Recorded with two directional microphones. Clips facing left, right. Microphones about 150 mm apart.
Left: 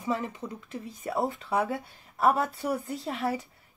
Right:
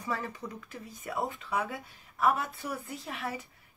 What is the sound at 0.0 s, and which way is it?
Speech, 20° left (ahead or behind).